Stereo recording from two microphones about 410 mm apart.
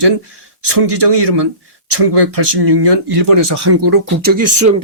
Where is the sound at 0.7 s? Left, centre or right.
Right.